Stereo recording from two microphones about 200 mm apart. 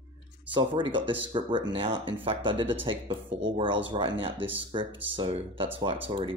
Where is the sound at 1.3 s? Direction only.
25° right (ahead or behind).